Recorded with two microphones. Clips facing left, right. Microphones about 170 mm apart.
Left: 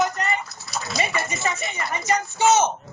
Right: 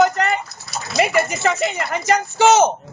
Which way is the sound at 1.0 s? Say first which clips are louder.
Right 9 dB; 75° right (ahead or behind).